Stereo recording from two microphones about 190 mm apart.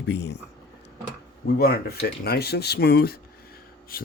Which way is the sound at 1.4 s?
55° left (ahead or behind).